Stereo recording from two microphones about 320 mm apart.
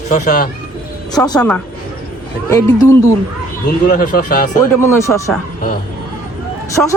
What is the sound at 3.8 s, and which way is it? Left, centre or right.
Speech, left.